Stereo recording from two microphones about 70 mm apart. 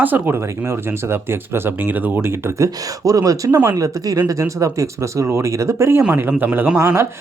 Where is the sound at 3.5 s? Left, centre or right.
Right.